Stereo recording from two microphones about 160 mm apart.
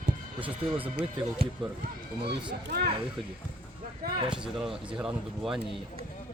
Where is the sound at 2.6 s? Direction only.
90° right.